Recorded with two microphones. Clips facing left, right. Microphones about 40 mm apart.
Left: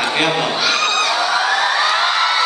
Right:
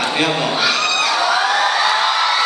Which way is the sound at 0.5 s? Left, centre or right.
Centre.